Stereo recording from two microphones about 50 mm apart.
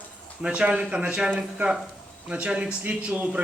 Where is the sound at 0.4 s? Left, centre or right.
Right.